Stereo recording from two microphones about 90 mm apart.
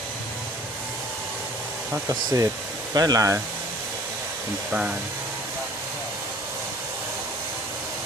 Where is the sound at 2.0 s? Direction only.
35° right (ahead or behind).